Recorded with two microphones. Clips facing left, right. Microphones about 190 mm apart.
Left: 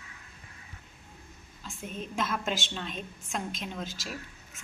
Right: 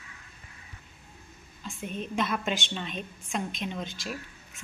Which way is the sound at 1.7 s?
Centre (ahead or behind).